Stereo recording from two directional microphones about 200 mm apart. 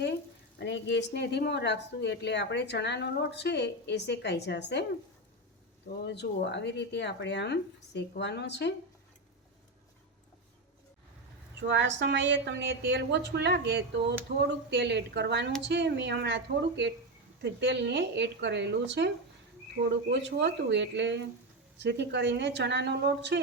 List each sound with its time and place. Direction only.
0.6 s a woman's voice: 60° left (ahead or behind)
6.1 s a woman's voice: 60° left (ahead or behind)
11.7 s a woman's voice: 60° right (ahead or behind)